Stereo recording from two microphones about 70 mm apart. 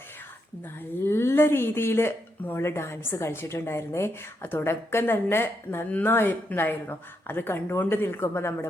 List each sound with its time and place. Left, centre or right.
1.0 s speech: left